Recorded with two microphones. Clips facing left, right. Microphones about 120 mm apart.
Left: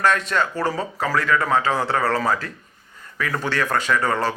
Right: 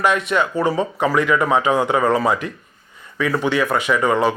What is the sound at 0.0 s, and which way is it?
Speech, 15° right (ahead or behind).